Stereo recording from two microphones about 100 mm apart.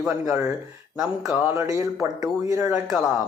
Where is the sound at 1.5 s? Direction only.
35° right (ahead or behind).